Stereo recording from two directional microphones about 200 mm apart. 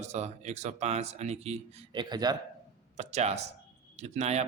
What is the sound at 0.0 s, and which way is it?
A man's voice, 35° right (ahead or behind).